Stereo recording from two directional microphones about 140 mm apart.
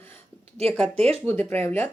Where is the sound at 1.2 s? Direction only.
15° left (ahead or behind).